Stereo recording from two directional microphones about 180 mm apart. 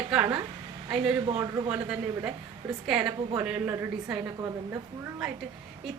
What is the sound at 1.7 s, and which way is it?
A woman's voice, 5° right (ahead or behind).